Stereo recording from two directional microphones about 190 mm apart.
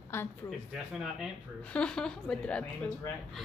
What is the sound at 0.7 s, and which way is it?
Speech, centre (ahead or behind).